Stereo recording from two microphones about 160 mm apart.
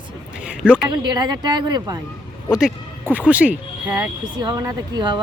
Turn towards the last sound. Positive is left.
turn(degrees=-25)  # may be behind; listen again after turning